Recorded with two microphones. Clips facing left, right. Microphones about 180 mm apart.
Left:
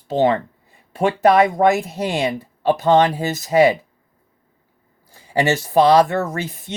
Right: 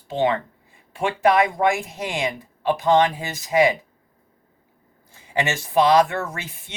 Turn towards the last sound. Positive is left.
turn(degrees=40)  # may be behind; listen again after turning